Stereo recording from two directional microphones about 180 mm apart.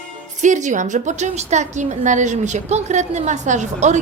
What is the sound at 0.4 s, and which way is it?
A woman's voice, 40° right (ahead or behind).